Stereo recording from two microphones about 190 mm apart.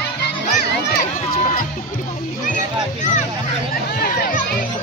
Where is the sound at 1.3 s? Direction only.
45° left (ahead or behind).